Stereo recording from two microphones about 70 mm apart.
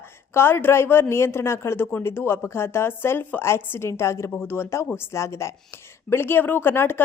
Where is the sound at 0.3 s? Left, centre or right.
Left.